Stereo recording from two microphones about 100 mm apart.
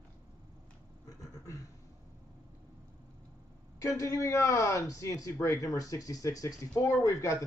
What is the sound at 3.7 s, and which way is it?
Speech, 35° left (ahead or behind).